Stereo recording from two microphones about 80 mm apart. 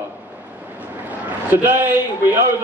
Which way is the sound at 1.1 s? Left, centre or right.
Right.